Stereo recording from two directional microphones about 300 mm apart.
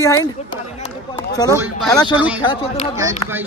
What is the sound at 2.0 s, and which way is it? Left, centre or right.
Speech, centre.